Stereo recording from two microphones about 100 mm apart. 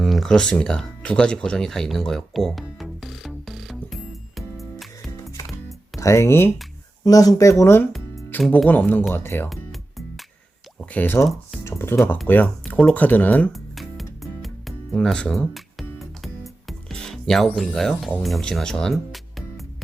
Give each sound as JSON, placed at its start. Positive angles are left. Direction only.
{"t": 0.0, "sound": "music", "side_deg": 0}
{"t": 6.0, "sound": "speech", "side_deg": 30}
{"t": 7.0, "sound": "speech", "side_deg": 40}
{"t": 7.6, "sound": "speech", "side_deg": 25}
{"t": 10.9, "sound": "speech", "side_deg": 20}
{"t": 11.6, "sound": "music", "side_deg": 25}
{"t": 12.3, "sound": "speech", "side_deg": 15}
{"t": 13.5, "sound": "music", "side_deg": 0}
{"t": 18.2, "sound": "speech", "side_deg": 0}